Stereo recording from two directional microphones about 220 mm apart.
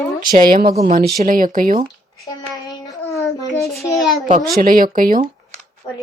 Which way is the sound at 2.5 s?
15° left (ahead or behind).